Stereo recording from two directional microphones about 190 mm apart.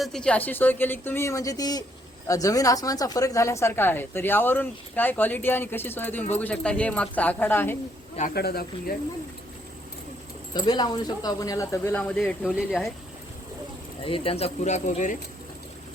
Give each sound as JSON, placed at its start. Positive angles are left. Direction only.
{"t": 0.0, "sound": "speech", "side_deg": 5}
{"t": 8.3, "sound": "speech", "side_deg": 55}
{"t": 10.7, "sound": "speech", "side_deg": 20}
{"t": 14.0, "sound": "speech", "side_deg": 30}